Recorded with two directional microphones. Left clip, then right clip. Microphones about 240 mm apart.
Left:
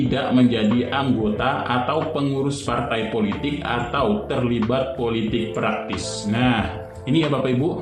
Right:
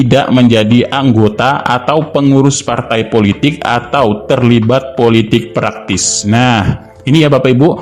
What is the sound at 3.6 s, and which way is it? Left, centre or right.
A man's voice, right.